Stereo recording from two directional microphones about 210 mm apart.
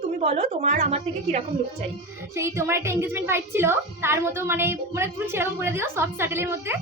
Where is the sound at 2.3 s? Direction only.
15° right (ahead or behind).